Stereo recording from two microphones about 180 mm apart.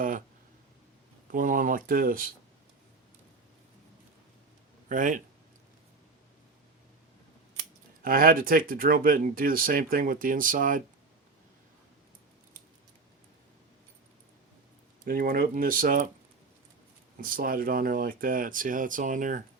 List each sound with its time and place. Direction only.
1.3 s speech: 50° right (ahead or behind)
4.9 s speech: 45° right (ahead or behind)
8.0 s speech: 55° right (ahead or behind)
15.0 s speech: 55° right (ahead or behind)
17.2 s speech: 50° right (ahead or behind)